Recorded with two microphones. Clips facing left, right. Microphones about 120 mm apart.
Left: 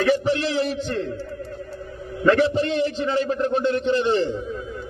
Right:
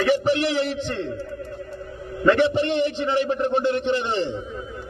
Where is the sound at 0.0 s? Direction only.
25° right (ahead or behind).